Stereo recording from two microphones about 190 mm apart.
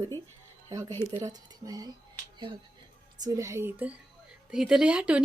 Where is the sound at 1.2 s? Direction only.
20° right (ahead or behind).